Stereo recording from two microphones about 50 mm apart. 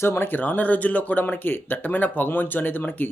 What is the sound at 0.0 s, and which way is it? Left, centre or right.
Speech, left.